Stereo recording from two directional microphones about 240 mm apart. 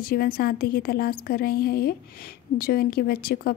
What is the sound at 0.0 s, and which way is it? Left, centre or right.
A woman's voice, left.